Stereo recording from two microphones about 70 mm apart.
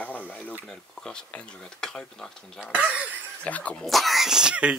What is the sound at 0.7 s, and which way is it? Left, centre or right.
Speech, centre.